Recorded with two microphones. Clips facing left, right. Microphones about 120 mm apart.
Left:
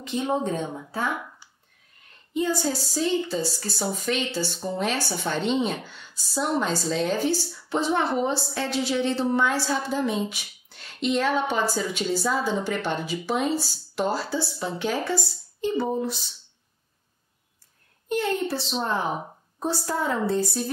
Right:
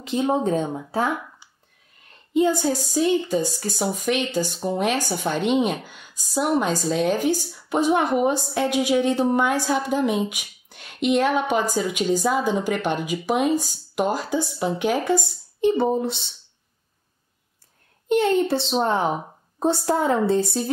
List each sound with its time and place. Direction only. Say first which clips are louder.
0.0 s speech: right 4 dB; 35° right (ahead or behind)
2.5 s speech: right 4 dB; 15° right (ahead or behind)
15.9 s a woman's voice: right 4 dB; 25° right (ahead or behind)
18.9 s a woman's voice: right 5 dB; 25° right (ahead or behind)